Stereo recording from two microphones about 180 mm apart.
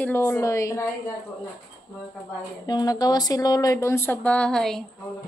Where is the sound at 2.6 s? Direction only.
20° left (ahead or behind); by 4.8 s 5° left (ahead or behind).